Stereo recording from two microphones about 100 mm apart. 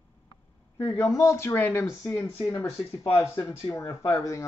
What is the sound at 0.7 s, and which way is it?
A woman's voice, 30° left (ahead or behind).